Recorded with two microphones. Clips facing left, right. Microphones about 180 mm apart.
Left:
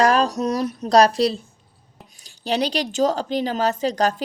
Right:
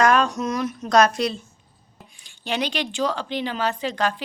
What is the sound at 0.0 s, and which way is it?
A woman's voice, 35° left (ahead or behind).